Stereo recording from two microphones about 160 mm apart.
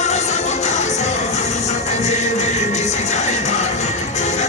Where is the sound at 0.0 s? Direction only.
45° left (ahead or behind).